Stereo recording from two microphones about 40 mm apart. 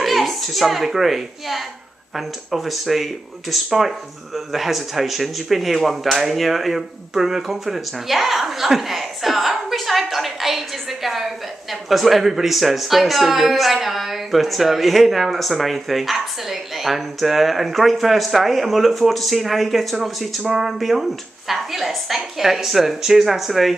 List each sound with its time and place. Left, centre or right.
0.0 s a child's voice: centre
20.4 s speech: centre